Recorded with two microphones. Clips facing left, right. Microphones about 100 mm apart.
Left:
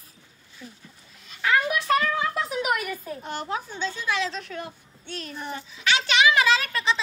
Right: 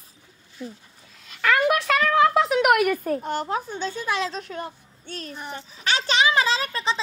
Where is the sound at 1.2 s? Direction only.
70° right (ahead or behind); by 7.0 s 30° right (ahead or behind).